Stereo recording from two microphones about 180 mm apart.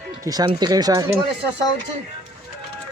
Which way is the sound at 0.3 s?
20° right (ahead or behind).